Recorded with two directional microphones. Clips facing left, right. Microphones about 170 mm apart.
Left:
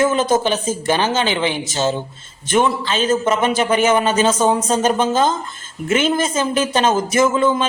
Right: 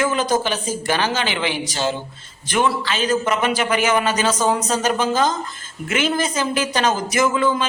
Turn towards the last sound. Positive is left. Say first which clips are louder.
# left 3 dB
turn(degrees=25)  # may be behind; listen again after turning